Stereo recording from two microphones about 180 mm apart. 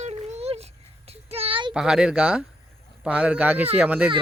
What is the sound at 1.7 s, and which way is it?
Speech, 5° right (ahead or behind).